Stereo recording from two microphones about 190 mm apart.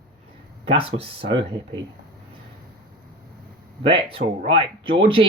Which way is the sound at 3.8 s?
30° right (ahead or behind).